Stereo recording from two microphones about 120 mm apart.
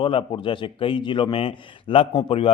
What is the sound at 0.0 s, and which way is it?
Speech, 45° left (ahead or behind).